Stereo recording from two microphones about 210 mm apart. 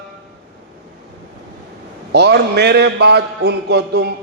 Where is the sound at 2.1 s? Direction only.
55° right (ahead or behind).